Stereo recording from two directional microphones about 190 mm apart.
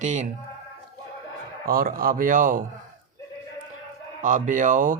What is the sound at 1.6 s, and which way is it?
A man's voice, 50° right (ahead or behind).